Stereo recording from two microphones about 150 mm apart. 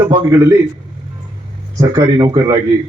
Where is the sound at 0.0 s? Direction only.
20° right (ahead or behind).